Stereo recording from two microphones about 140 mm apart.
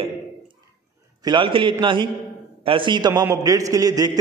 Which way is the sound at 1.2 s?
35° right (ahead or behind).